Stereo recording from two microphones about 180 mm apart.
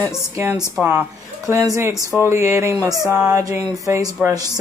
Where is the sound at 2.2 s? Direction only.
15° right (ahead or behind).